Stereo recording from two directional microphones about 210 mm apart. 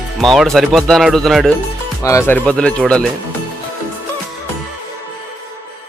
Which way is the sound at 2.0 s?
15° left (ahead or behind).